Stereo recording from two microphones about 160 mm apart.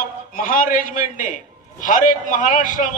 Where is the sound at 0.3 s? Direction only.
60° left (ahead or behind).